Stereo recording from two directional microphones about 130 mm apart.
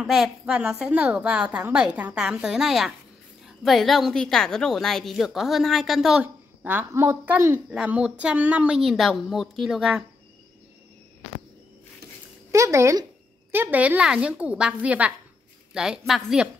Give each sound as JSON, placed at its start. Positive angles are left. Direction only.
{"t": 0.0, "sound": "a woman's voice", "side_deg": 0}
{"t": 12.4, "sound": "a woman's voice", "side_deg": -25}